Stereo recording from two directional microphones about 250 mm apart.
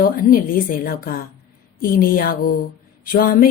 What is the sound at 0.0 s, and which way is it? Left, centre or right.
A woman's voice, left.